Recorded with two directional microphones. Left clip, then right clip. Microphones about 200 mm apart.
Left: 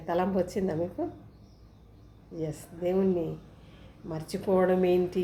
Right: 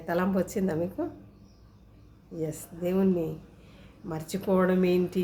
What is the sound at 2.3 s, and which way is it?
A woman's voice, 20° right (ahead or behind).